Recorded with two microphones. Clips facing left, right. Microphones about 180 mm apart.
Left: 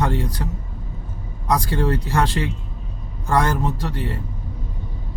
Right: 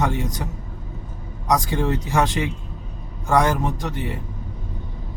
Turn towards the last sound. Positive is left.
turn(degrees=-15)  # may be behind; listen again after turning